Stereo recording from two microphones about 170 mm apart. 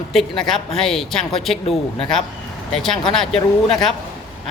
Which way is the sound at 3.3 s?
35° left (ahead or behind).